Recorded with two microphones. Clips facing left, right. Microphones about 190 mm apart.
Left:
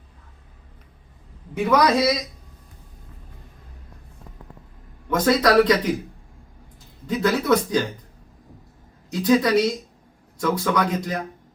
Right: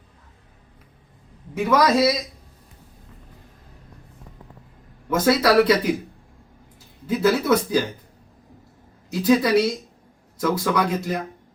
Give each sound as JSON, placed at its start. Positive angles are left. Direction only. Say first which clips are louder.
{"t": 1.5, "sound": "speech", "louder": "even", "side_deg": -5}
{"t": 5.0, "sound": "speech", "louder": "even", "side_deg": -5}
{"t": 7.1, "sound": "speech", "louder": "right 1 dB", "side_deg": -5}
{"t": 9.0, "sound": "speech", "louder": "even", "side_deg": -5}